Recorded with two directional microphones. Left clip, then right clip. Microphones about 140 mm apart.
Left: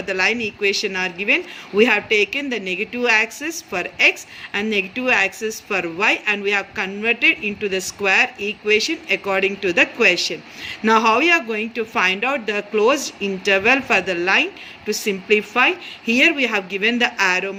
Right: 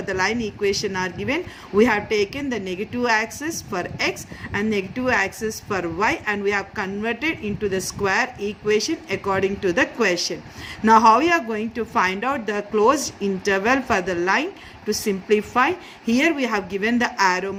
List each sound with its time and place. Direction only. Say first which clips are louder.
0.0 s speech: left 3 dB; 45° right (ahead or behind)